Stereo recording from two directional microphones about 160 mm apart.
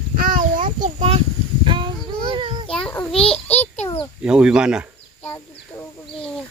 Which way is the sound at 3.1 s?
40° left (ahead or behind).